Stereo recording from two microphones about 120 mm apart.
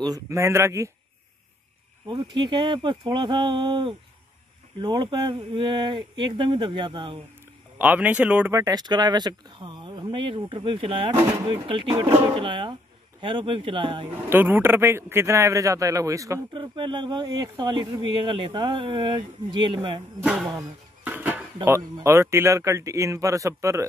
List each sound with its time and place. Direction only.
0.0 s speech: 25° right (ahead or behind)
2.1 s speech: 40° right (ahead or behind)
7.8 s speech: 15° right (ahead or behind)
8.5 s speech: 30° right (ahead or behind)
14.3 s speech: 15° right (ahead or behind)
16.5 s speech: 45° right (ahead or behind)
20.5 s a sound: 15° right (ahead or behind)
21.6 s speech: 25° right (ahead or behind)